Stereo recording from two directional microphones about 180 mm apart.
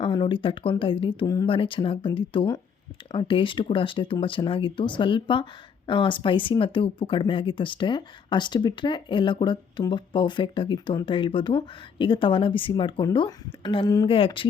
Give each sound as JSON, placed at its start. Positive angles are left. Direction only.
{"t": 0.0, "sound": "speech", "side_deg": 25}